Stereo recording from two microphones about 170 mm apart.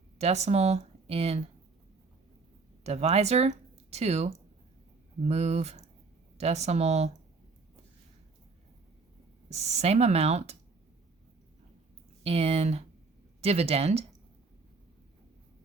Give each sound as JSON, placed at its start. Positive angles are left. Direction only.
{"t": 0.2, "sound": "speech", "side_deg": -40}
{"t": 2.8, "sound": "speech", "side_deg": -40}
{"t": 9.5, "sound": "speech", "side_deg": -40}
{"t": 12.2, "sound": "speech", "side_deg": -40}